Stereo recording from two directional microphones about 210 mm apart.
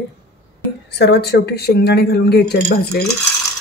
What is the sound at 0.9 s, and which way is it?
Speech, 50° left (ahead or behind).